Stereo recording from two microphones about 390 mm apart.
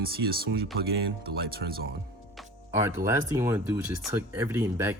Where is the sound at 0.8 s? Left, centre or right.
Right.